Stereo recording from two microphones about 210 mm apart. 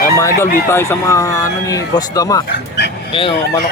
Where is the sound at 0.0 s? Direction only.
15° left (ahead or behind).